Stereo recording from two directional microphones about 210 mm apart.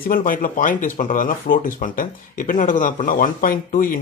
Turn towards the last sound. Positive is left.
turn(degrees=40)  # may be behind; listen again after turning